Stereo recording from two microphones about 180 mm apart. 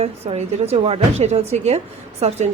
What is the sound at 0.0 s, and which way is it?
A woman's voice, 35° right (ahead or behind).